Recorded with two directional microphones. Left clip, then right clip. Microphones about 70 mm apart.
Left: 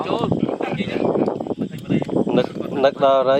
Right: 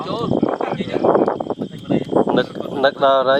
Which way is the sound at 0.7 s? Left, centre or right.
Centre.